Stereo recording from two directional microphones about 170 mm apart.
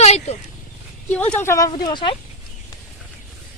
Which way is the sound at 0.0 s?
40° left (ahead or behind).